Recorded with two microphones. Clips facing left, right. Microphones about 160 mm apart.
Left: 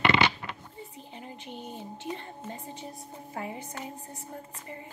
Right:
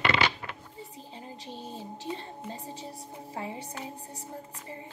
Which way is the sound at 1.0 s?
30° right (ahead or behind).